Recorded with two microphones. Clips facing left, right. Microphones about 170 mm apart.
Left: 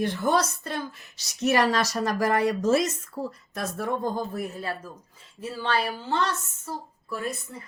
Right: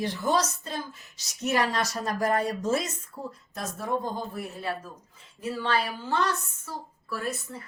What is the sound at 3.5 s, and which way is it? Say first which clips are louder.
Speech: left 3 dB; 65° left (ahead or behind).